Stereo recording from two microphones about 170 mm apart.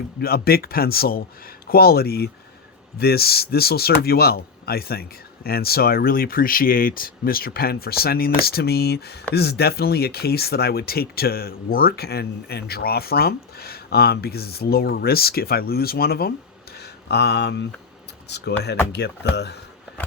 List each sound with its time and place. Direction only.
0.2 s speech: 65° left (ahead or behind)
16.7 s a sound: 75° left (ahead or behind)
18.3 s speech: 75° left (ahead or behind)